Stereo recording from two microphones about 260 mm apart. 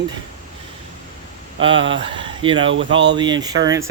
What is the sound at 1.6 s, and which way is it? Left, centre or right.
Speech, centre.